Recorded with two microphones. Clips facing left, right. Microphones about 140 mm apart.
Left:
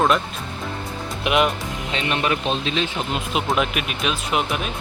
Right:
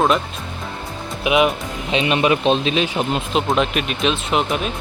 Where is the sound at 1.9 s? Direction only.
15° right (ahead or behind).